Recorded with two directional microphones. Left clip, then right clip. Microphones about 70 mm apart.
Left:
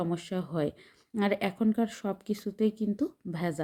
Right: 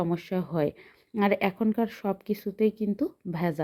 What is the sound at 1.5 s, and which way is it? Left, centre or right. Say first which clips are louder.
A woman's voice: right 2 dB; centre.